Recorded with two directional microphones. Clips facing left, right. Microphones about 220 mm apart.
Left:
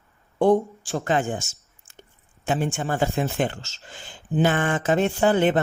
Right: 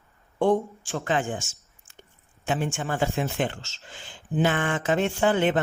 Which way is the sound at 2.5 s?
40° left (ahead or behind).